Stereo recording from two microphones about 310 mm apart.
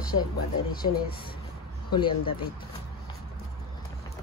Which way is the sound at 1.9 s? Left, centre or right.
Centre.